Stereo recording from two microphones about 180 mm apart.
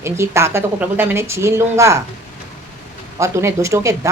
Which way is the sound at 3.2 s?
15° right (ahead or behind).